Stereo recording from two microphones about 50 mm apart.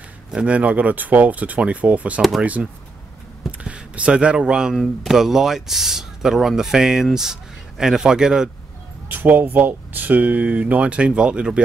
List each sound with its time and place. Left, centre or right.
0.3 s speech: right
9.1 s speech: right; by 11.6 s centre